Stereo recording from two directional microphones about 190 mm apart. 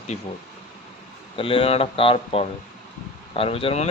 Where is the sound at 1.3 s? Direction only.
30° left (ahead or behind).